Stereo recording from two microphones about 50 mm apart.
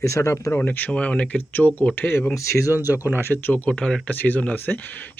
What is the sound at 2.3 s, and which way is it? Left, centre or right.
Speech, left.